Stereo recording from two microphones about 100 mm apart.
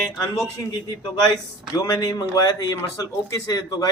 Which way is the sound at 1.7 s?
40° left (ahead or behind).